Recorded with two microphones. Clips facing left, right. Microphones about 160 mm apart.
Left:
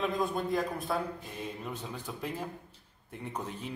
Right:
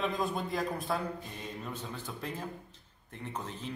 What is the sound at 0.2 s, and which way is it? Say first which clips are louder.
A man's voice: left 2 dB; centre (ahead or behind).